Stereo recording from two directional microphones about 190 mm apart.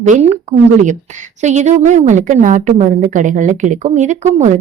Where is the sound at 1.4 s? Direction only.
35° right (ahead or behind).